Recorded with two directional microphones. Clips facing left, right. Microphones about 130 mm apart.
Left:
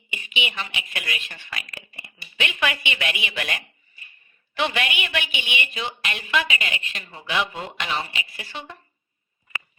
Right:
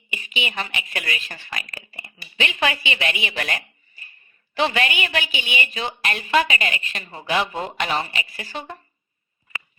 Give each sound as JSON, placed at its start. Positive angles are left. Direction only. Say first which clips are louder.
{"t": 0.1, "sound": "a woman's voice", "louder": "right 1 dB", "side_deg": -40}